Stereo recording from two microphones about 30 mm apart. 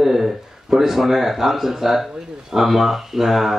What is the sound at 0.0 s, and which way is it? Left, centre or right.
Speech, centre.